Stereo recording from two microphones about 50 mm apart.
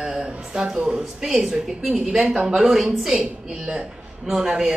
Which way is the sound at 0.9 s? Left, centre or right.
Centre.